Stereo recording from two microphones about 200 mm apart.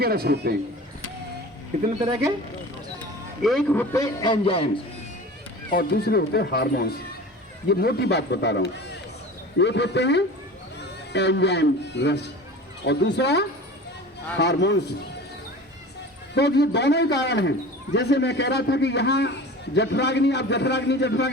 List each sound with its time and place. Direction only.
0.0 s a man's voice: 50° right (ahead or behind)
3.4 s a man's voice: 5° left (ahead or behind); by 4.7 s 25° left (ahead or behind)
5.7 s a man's voice: 50° left (ahead or behind)
16.3 s a man's voice: 55° left (ahead or behind)